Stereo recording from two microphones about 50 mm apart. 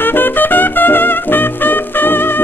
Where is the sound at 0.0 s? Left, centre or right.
Left.